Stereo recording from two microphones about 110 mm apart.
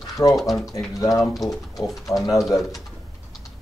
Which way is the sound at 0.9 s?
30° left (ahead or behind).